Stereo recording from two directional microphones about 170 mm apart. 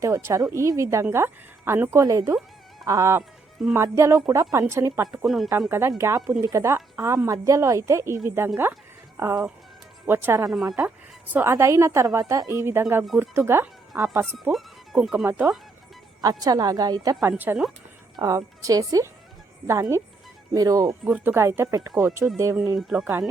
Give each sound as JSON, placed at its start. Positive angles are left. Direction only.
{"t": 0.0, "sound": "speech", "side_deg": -15}
{"t": 5.2, "sound": "speech", "side_deg": 0}
{"t": 5.5, "sound": "speech", "side_deg": -15}
{"t": 10.5, "sound": "speech", "side_deg": 0}
{"t": 14.5, "sound": "a woman's voice", "side_deg": -5}
{"t": 21.0, "sound": "speech", "side_deg": -10}
{"t": 22.9, "sound": "speech", "side_deg": -5}